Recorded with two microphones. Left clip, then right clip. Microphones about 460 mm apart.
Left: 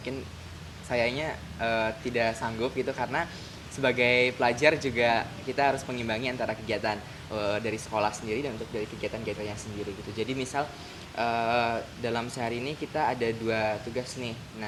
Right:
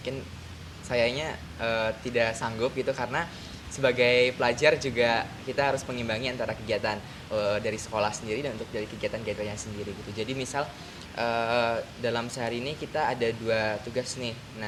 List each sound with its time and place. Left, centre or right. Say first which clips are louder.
0.9 s speech: right 1 dB; centre